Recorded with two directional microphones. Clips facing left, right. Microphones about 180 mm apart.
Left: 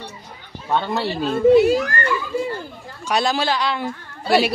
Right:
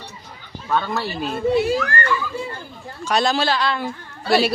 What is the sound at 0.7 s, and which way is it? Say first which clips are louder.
Speech: left 1 dB; 25° left (ahead or behind).